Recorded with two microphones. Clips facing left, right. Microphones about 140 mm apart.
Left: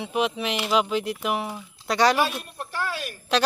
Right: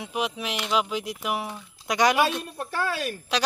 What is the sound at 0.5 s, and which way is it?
Speech, 5° left (ahead or behind).